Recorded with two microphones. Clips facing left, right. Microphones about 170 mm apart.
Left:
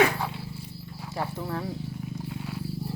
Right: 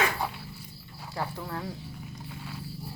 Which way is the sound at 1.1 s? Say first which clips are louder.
Left 3 dB; 20° left (ahead or behind).